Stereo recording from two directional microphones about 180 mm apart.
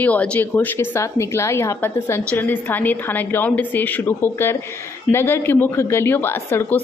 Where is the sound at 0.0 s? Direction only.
5° left (ahead or behind).